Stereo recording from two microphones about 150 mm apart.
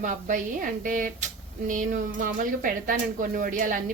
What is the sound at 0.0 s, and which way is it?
A woman's voice, 60° right (ahead or behind).